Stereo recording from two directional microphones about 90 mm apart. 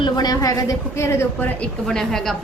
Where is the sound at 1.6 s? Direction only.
5° left (ahead or behind).